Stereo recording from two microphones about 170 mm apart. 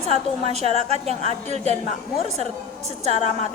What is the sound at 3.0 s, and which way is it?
Speech, 40° right (ahead or behind).